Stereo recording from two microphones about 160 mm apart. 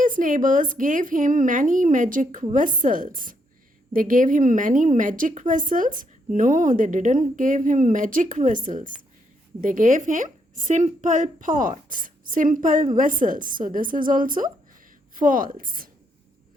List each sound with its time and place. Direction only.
0.0 s a woman's voice: 55° right (ahead or behind)